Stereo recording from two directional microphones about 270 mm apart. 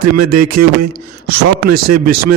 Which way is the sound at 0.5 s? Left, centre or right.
Right.